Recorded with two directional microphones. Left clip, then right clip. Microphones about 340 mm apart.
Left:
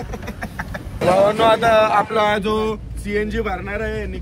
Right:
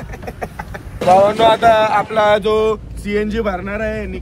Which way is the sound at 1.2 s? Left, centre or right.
Centre.